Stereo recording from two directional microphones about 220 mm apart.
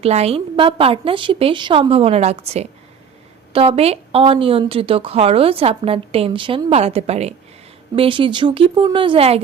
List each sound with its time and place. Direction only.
0.0 s speech: 30° right (ahead or behind)